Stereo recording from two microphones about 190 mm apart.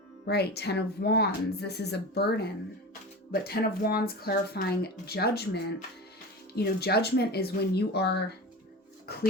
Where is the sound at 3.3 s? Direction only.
55° left (ahead or behind).